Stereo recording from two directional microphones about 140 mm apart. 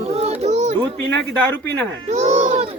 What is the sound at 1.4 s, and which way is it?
Speech, 10° left (ahead or behind).